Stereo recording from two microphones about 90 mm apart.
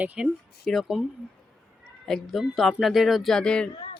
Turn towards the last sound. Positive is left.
turn(degrees=10)  # may be behind; listen again after turning